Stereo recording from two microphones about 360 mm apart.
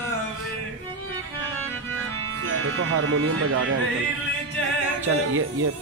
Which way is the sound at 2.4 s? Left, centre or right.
Right.